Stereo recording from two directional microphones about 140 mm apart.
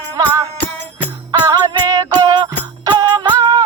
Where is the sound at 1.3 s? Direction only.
30° right (ahead or behind).